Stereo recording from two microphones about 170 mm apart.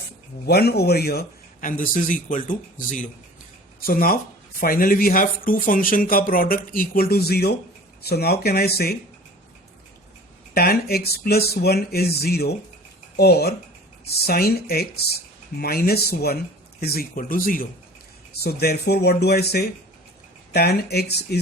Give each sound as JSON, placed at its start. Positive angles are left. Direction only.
{"t": 0.4, "sound": "speech", "side_deg": 70}
{"t": 1.8, "sound": "speech", "side_deg": 50}
{"t": 10.5, "sound": "speech", "side_deg": 65}
{"t": 18.4, "sound": "speech", "side_deg": 70}